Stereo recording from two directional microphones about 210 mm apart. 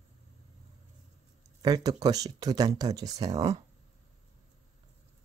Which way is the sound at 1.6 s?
20° right (ahead or behind).